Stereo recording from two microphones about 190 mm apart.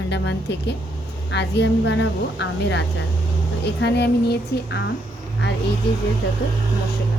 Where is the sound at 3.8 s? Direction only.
60° left (ahead or behind).